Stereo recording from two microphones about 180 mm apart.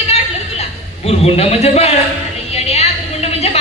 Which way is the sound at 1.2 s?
35° left (ahead or behind).